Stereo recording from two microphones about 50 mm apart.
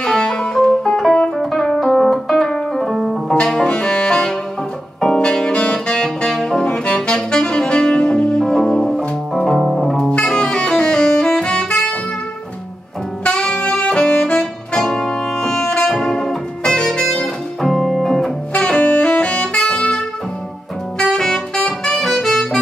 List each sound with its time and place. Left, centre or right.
0.0 s music: centre
3.3 s music: centre
5.0 s saxophone: centre
8.9 s organ: centre
9.6 s music: centre
9.9 s saxophone: centre
13.2 s saxophone: left
14.8 s music: centre
18.5 s saxophone: left
21.0 s saxophone: centre
21.5 s music: centre
22.0 s music: centre